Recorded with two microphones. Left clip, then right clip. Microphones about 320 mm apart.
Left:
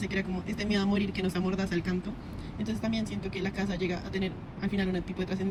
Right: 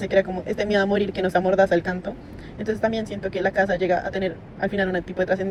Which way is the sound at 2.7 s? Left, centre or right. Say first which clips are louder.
Right 10 dB; centre.